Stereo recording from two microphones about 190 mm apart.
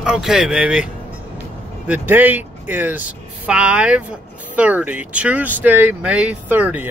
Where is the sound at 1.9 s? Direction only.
10° right (ahead or behind).